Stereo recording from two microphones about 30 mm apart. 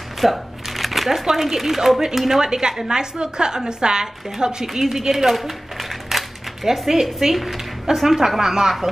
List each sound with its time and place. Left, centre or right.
0.2 s shuffling cards: centre
1.2 s speech: centre
2.4 s a woman's voice: right
4.8 s speech: centre
5.3 s a sound: centre
6.6 s speech: centre